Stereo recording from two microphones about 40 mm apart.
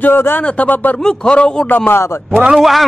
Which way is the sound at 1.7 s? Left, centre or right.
Left.